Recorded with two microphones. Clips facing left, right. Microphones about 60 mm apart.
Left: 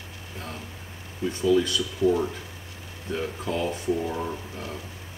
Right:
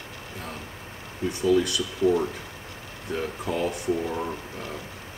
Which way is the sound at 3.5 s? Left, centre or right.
Right.